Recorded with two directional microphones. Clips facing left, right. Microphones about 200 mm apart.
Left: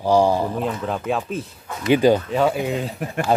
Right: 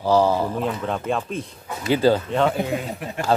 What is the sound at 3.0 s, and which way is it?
Speech, 45° left (ahead or behind).